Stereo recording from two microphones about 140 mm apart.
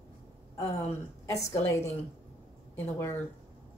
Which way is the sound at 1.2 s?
20° left (ahead or behind).